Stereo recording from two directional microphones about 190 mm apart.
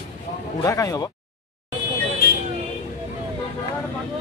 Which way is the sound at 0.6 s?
15° left (ahead or behind).